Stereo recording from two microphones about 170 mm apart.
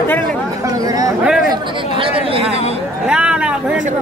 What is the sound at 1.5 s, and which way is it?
Chatter, 35° right (ahead or behind).